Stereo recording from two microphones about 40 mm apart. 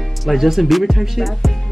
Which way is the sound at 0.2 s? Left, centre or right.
Centre.